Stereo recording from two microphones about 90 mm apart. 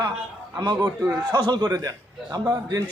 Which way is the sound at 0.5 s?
45° right (ahead or behind).